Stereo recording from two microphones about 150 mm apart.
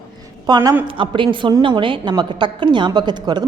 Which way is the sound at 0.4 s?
25° right (ahead or behind).